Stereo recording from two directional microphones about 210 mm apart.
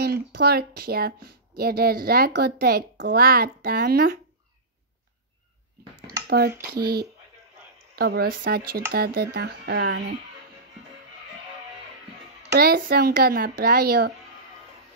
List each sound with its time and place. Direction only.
0.0 s speech: 50° right (ahead or behind)
6.2 s speech: 50° right (ahead or behind)
12.5 s speech: 45° right (ahead or behind)